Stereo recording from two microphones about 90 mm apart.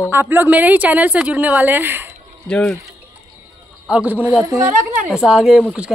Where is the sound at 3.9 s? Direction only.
20° right (ahead or behind).